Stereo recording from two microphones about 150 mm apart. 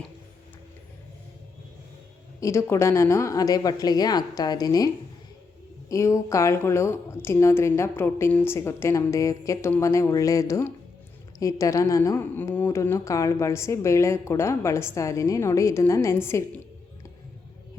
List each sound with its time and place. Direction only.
2.4 s a woman's voice: 20° left (ahead or behind)
5.9 s a woman's voice: 20° left (ahead or behind)